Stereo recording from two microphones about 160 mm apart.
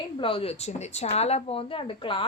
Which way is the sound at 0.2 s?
35° left (ahead or behind).